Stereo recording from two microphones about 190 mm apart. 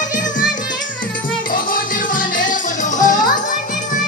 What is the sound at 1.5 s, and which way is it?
Music, 45° left (ahead or behind).